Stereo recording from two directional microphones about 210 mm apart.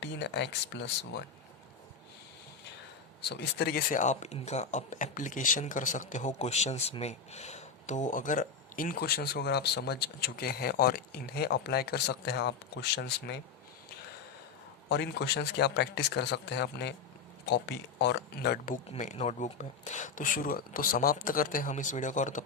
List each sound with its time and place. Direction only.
0.0 s speech: 55° left (ahead or behind)
3.2 s speech: 50° left (ahead or behind)
14.8 s speech: 55° left (ahead or behind); by 22.4 s 35° left (ahead or behind)